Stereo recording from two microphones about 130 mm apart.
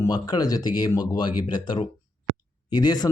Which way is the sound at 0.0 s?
30° left (ahead or behind).